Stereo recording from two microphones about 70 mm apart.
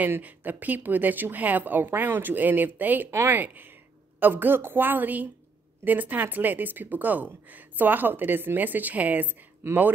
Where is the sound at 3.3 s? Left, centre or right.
Right.